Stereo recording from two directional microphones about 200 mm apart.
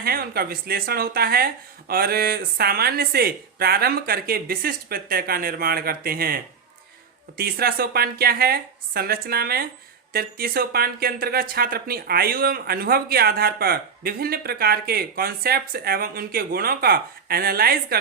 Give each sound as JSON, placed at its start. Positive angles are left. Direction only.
{"t": 0.0, "sound": "speech", "side_deg": -50}